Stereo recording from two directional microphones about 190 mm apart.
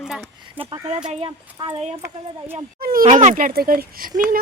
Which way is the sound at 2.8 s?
50° right (ahead or behind).